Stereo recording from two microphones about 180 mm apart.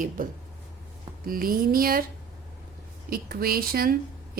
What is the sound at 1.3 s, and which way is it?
Speech, 55° right (ahead or behind).